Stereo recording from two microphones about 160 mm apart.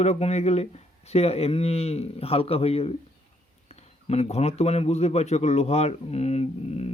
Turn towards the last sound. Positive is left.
turn(degrees=40)  # may be behind; listen again after turning